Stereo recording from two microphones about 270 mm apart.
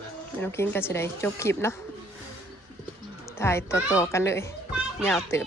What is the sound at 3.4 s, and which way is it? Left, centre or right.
A woman's voice, centre.